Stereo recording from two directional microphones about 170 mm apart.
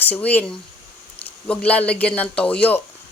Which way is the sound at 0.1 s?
10° left (ahead or behind).